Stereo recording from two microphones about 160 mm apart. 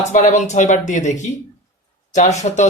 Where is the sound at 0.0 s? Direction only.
50° left (ahead or behind).